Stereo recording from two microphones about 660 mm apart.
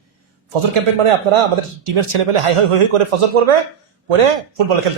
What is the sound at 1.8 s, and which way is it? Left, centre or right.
Speech, right.